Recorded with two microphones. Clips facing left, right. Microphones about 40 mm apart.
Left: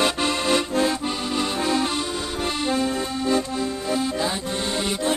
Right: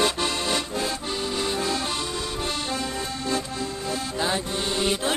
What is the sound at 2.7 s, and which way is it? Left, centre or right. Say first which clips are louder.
Accordion: left 5 dB; centre.